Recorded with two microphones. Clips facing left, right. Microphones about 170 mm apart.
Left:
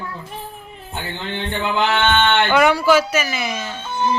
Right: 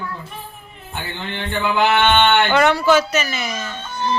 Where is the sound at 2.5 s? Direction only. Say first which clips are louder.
Even; 10° left (ahead or behind).